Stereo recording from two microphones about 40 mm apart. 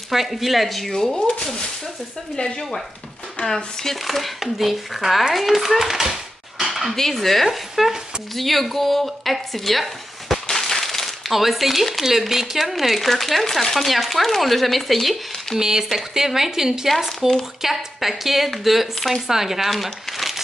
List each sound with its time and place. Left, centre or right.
0.1 s speech: centre
6.6 s dishes: centre
7.0 s speech: centre
10.7 s a sound: centre
11.3 s speech: centre